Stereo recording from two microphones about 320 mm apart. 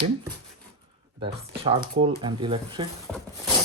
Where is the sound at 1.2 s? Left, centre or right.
Centre.